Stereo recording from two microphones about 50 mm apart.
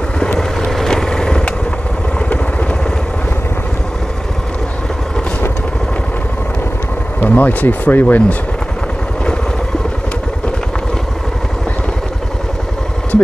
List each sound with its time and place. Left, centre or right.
0.4 s vehicle: centre
2.1 s vehicle: left
7.2 s speech: left